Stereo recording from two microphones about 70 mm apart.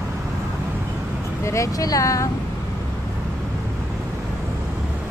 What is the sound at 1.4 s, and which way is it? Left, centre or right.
Speech, left.